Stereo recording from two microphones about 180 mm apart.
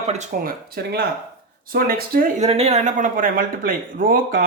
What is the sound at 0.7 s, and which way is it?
Speech, 60° right (ahead or behind).